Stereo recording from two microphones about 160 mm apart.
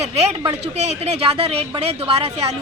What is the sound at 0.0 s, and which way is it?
Speech, 40° right (ahead or behind).